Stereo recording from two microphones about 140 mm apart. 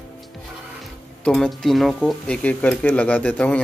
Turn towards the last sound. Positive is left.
turn(degrees=10)  # may be behind; listen again after turning